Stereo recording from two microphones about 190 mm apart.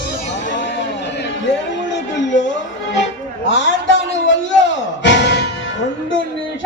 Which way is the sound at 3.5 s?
70° left (ahead or behind).